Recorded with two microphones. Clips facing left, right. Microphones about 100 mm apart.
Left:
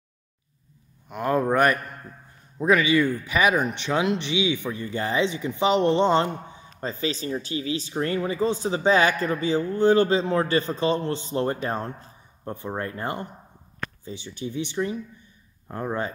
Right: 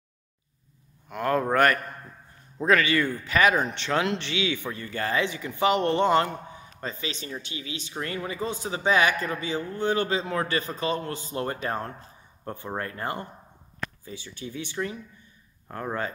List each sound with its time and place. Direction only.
1.0 s a man's voice: 20° left (ahead or behind)